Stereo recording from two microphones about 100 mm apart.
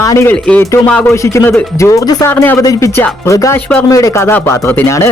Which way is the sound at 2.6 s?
35° left (ahead or behind).